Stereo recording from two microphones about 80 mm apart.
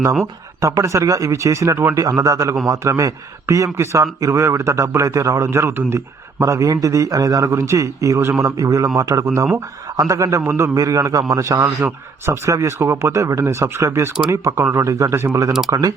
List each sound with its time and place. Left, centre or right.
0.6 s a man's voice: right
6.4 s a man's voice: right
7.5 s a man's voice: right
10.8 s a man's voice: right
11.8 s speech: right